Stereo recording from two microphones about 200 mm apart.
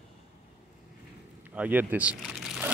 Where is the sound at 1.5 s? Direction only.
10° right (ahead or behind).